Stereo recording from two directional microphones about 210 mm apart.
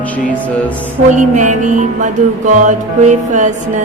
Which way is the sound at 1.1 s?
35° right (ahead or behind).